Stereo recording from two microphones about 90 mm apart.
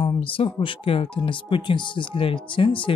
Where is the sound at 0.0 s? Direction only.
80° left.